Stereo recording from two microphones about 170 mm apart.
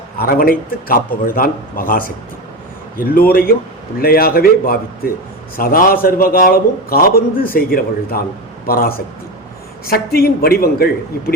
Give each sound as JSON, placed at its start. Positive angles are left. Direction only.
{"t": 0.2, "sound": "a man's voice", "side_deg": 60}